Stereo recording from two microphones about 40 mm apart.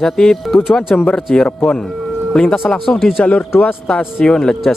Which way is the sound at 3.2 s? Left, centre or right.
Left.